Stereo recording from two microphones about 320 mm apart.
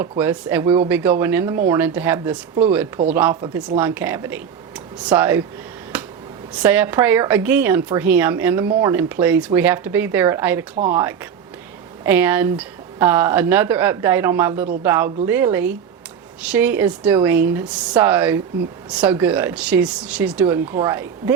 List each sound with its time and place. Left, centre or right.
0.0 s speech: centre
5.9 s finger snapping: centre
6.5 s a woman's voice: centre
12.0 s a woman's voice: centre